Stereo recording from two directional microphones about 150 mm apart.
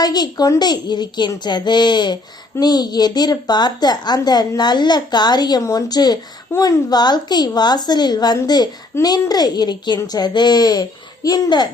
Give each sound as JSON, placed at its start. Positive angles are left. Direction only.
{"t": 0.0, "sound": "a woman's voice", "side_deg": 25}